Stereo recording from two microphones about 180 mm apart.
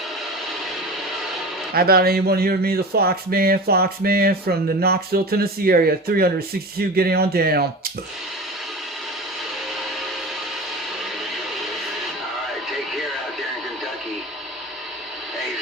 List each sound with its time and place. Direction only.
1.7 s speech: 60° right (ahead or behind)